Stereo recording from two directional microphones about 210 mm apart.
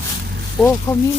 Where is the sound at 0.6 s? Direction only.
15° left (ahead or behind).